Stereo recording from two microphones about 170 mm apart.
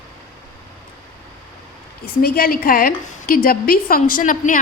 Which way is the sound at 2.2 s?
60° left (ahead or behind).